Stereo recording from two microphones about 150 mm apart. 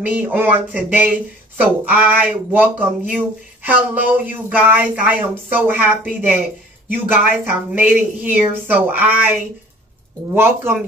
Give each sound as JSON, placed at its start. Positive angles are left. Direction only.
{"t": 0.0, "sound": "speech", "side_deg": -10}